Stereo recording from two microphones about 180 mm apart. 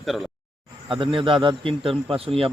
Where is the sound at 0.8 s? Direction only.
25° right (ahead or behind).